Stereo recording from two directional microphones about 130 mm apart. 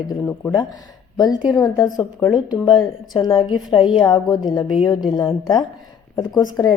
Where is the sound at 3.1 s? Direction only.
30° left (ahead or behind).